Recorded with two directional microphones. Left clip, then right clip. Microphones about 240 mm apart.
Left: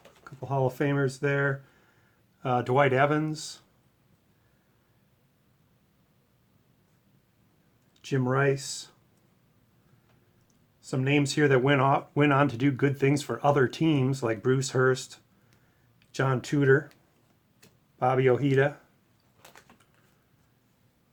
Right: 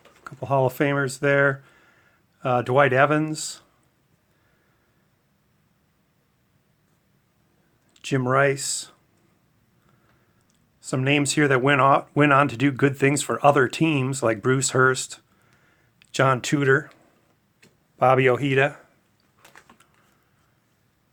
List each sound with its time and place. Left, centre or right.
0.3 s speech: right
7.9 s speech: right
10.8 s speech: right
17.9 s speech: right
19.4 s a sound: centre